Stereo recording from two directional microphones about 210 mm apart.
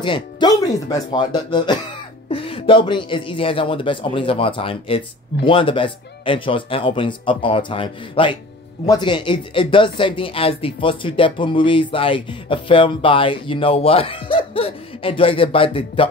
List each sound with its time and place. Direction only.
0.0 s speech: 20° left (ahead or behind)